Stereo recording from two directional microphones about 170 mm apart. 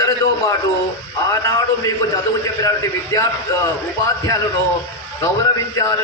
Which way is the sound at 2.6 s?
20° left (ahead or behind).